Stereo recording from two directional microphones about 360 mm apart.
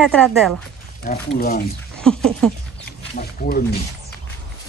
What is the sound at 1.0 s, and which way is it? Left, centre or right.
Speech, left.